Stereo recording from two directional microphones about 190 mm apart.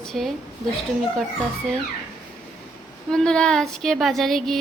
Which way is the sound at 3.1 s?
5° left (ahead or behind).